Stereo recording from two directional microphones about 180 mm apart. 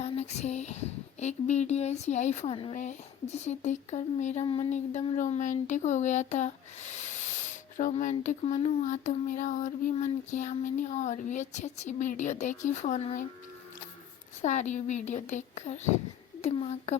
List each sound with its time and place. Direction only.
0.0 s speech: 40° left (ahead or behind)
4.4 s a sound: 30° left (ahead or behind)
4.7 s speech: 40° left (ahead or behind)
14.4 s speech: 40° left (ahead or behind)